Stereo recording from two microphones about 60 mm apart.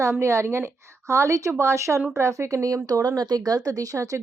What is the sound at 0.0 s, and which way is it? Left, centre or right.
A woman's voice, right.